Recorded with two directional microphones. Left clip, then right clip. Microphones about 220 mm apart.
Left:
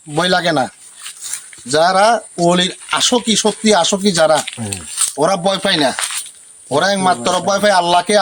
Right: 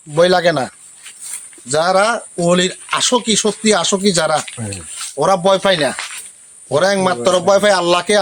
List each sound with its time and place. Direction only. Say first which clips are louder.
0.1 s speech: right 2 dB; 10° right (ahead or behind)
4.4 s speech: left 3 dB; 50° left (ahead or behind)
5.2 s speech: right 3 dB; 10° right (ahead or behind)